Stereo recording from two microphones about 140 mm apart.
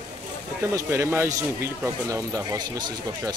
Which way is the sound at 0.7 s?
15° right (ahead or behind).